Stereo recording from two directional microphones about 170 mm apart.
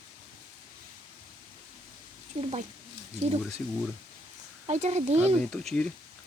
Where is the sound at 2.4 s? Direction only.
35° right (ahead or behind).